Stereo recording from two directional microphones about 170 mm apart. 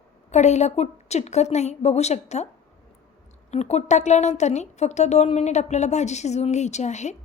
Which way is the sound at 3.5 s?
40° left (ahead or behind).